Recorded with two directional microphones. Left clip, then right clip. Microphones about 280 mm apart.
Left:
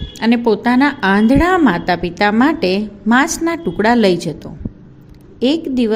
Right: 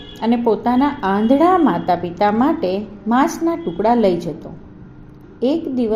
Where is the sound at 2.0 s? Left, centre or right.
Left.